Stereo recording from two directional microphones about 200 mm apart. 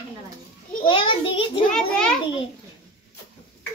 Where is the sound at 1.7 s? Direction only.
5° left (ahead or behind).